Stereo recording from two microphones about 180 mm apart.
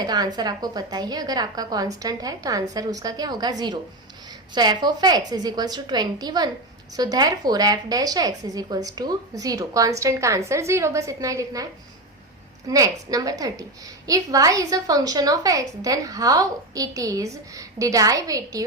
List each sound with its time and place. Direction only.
0.0 s a woman's voice: 20° right (ahead or behind)
4.5 s a woman's voice: 25° right (ahead or behind)